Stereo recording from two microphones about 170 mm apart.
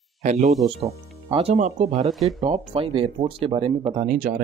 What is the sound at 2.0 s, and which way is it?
Speech, centre (ahead or behind).